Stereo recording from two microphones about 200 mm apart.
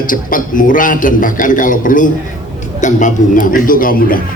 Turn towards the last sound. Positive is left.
turn(degrees=45)  # may be behind; listen again after turning